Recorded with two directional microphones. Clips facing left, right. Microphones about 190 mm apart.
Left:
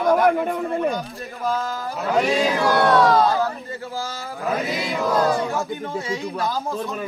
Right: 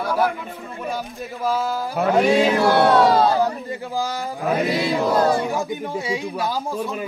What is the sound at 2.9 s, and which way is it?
Chant, 30° right (ahead or behind).